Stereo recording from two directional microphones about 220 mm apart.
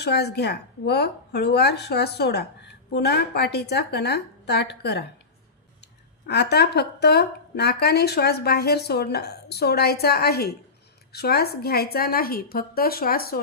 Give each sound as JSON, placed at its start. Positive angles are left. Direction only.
{"t": 0.0, "sound": "a woman's voice", "side_deg": 50}